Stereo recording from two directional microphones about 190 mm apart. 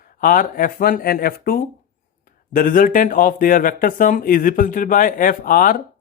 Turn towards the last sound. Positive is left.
turn(degrees=45)  # may be behind; listen again after turning